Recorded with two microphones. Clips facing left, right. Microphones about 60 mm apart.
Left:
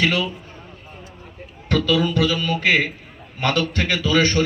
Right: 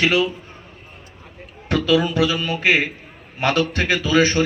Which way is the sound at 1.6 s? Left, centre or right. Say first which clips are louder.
Right 1 dB; centre.